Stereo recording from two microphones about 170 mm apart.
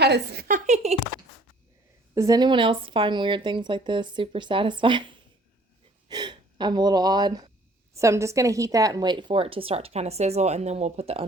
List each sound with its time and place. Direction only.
0.0 s a woman's voice: 70° right (ahead or behind); by 0.8 s 55° right (ahead or behind)
2.1 s a woman's voice: 20° right (ahead or behind); by 11.3 s 35° right (ahead or behind)